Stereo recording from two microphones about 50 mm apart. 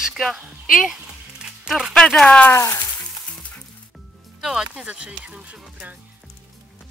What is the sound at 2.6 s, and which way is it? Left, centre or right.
Sizzle, left.